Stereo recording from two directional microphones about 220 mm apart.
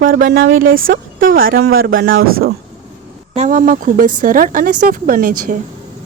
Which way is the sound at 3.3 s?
35° right (ahead or behind).